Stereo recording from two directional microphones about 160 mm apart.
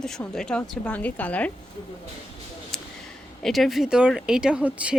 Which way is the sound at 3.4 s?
Centre (ahead or behind).